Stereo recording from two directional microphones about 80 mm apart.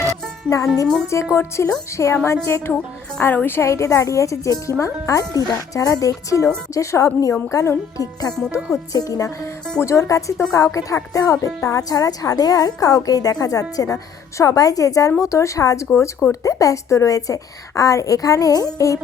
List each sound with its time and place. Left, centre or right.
0.5 s a woman's voice: left